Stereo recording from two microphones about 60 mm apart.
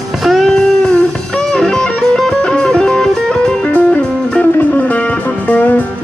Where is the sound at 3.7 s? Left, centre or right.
Left.